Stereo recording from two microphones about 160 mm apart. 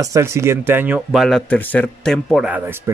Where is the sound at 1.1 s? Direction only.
Centre (ahead or behind).